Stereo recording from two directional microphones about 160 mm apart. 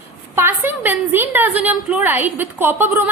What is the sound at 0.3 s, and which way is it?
A woman's voice, 15° right (ahead or behind).